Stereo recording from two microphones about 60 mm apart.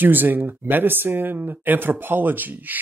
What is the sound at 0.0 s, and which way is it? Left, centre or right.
Speech, right.